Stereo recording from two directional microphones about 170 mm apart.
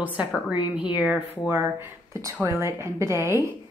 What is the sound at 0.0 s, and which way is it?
A woman's voice, 10° right (ahead or behind).